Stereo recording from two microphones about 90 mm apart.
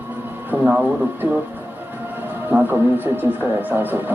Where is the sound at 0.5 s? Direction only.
15° right (ahead or behind).